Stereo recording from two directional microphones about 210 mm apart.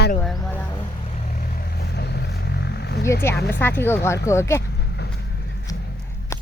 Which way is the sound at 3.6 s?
10° left (ahead or behind).